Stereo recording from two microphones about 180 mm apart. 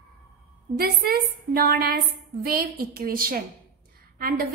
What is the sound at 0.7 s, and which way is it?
A woman's voice, 55° right (ahead or behind).